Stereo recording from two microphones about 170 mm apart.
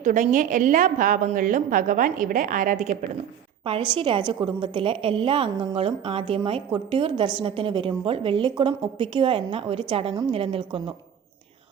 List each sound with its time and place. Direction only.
0.0 s a woman's voice: 50° right (ahead or behind)
3.6 s a woman's voice: 30° right (ahead or behind)